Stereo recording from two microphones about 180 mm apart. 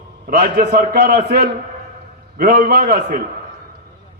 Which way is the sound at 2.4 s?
55° right (ahead or behind).